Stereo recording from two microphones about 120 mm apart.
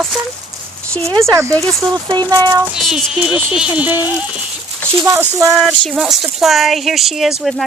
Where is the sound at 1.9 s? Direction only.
35° right (ahead or behind).